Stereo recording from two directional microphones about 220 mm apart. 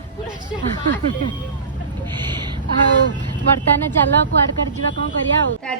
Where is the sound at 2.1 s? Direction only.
20° right (ahead or behind).